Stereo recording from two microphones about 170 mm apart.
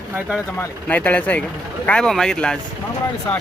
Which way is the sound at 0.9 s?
10° left (ahead or behind).